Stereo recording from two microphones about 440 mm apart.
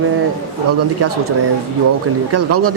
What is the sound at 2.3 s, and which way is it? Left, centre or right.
Speech, right.